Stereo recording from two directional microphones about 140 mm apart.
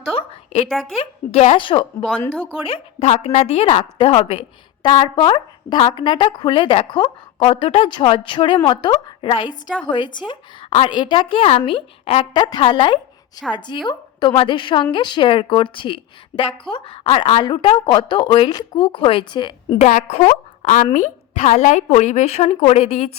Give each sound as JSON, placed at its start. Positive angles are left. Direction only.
{"t": 0.1, "sound": "a sound", "side_deg": 45}
{"t": 0.9, "sound": "a woman's voice", "side_deg": 50}
{"t": 1.5, "sound": "a woman's voice", "side_deg": 35}
{"t": 2.0, "sound": "speech", "side_deg": 10}
{"t": 2.4, "sound": "a woman's voice", "side_deg": 40}
{"t": 4.8, "sound": "a woman's voice", "side_deg": 35}
{"t": 19.8, "sound": "a woman's voice", "side_deg": 60}